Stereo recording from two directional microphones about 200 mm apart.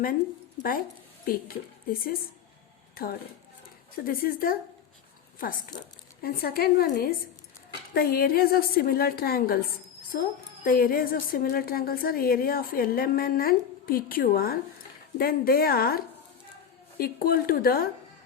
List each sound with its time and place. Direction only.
1.2 s a woman's voice: 45° left (ahead or behind)